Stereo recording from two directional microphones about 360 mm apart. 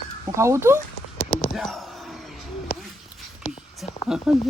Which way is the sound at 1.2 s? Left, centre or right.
Left.